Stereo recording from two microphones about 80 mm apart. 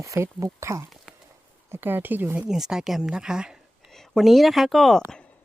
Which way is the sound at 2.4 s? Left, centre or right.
Centre.